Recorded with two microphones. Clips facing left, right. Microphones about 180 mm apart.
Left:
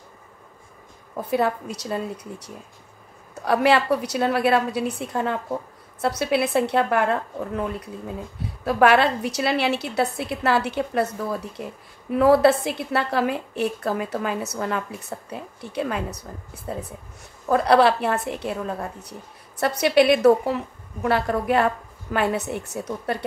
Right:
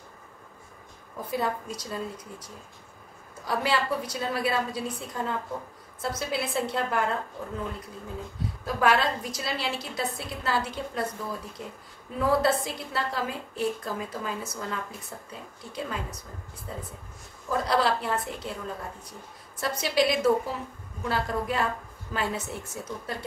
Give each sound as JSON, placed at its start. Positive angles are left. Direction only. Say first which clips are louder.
{"t": 1.1, "sound": "a woman's voice", "louder": "left 7 dB", "side_deg": 70}
{"t": 8.6, "sound": "a woman's voice", "louder": "left 7 dB", "side_deg": 70}
{"t": 17.5, "sound": "a woman's voice", "louder": "left 8 dB", "side_deg": 65}